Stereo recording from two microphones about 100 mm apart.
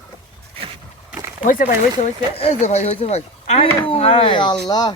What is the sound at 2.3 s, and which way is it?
Speech, 85° left.